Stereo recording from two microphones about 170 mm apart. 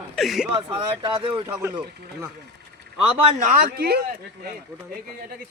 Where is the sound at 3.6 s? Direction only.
65° right (ahead or behind).